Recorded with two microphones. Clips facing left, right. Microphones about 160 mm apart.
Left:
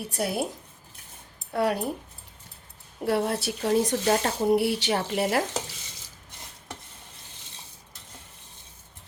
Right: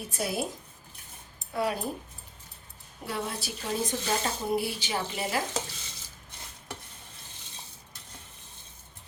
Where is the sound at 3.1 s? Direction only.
65° left (ahead or behind).